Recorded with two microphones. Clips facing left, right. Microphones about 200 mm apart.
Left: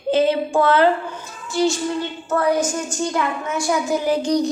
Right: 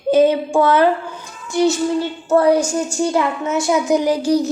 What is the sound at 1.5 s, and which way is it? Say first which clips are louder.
Child singing: right 3 dB; 20° right (ahead or behind).